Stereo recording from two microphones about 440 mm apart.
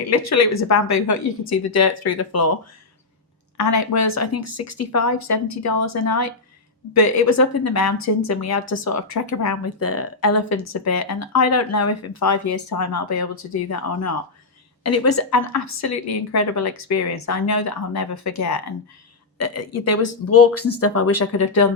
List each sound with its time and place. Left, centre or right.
0.1 s speech: left
3.6 s speech: left